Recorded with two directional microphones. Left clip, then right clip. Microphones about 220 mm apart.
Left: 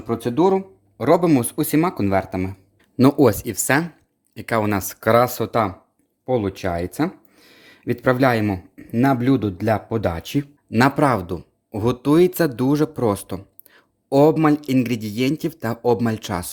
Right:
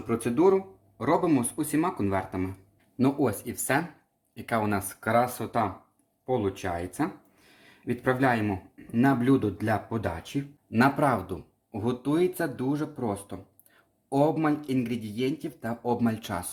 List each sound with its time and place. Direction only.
0.1 s speech: 40° left (ahead or behind)